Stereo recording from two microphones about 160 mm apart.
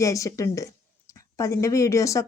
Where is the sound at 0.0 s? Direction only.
20° left (ahead or behind).